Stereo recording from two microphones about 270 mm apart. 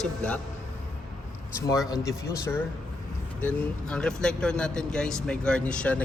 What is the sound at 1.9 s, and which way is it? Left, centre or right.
Speech, centre.